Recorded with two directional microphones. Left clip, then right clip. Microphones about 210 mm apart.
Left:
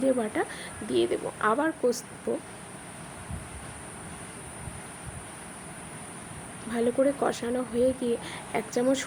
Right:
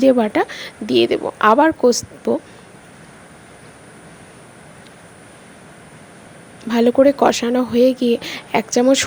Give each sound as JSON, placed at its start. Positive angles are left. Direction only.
{"t": 0.0, "sound": "speech", "side_deg": -45}
{"t": 6.7, "sound": "speech", "side_deg": -45}